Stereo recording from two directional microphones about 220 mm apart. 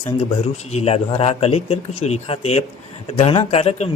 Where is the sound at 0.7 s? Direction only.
25° left (ahead or behind).